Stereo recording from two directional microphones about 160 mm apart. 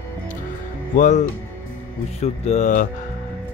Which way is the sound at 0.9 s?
50° left (ahead or behind).